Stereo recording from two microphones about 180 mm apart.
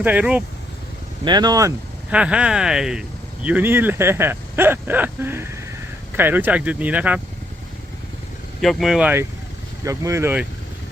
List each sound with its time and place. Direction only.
0.0 s speech: 10° right (ahead or behind)
1.2 s speech: 25° right (ahead or behind)
2.0 s speech: 5° right (ahead or behind)
8.6 s speech: centre (ahead or behind)